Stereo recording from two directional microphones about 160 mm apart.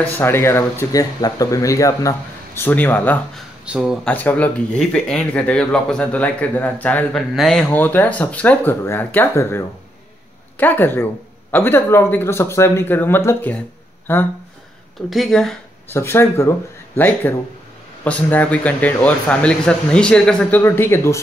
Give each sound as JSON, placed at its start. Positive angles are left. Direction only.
{"t": 0.2, "sound": "speech", "side_deg": 15}
{"t": 3.6, "sound": "speech", "side_deg": -5}
{"t": 4.0, "sound": "speech", "side_deg": 10}
{"t": 15.0, "sound": "speech", "side_deg": 0}
{"t": 15.9, "sound": "speech", "side_deg": 15}